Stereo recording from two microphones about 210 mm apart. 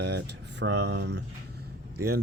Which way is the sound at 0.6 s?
55° right (ahead or behind).